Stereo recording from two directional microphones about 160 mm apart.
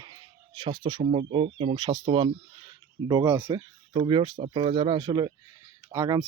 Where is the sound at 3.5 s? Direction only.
30° right (ahead or behind).